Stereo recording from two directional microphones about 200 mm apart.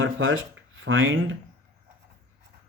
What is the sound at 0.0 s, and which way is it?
Speech, 75° right (ahead or behind).